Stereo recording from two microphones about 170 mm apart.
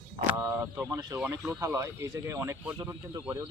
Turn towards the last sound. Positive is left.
turn(degrees=-15)  # may be behind; listen again after turning